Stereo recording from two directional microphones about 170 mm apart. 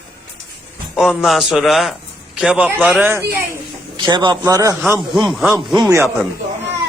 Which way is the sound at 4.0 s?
25° right (ahead or behind).